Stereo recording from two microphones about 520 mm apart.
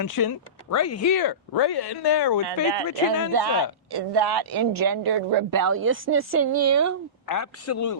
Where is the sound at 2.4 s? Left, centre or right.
Right.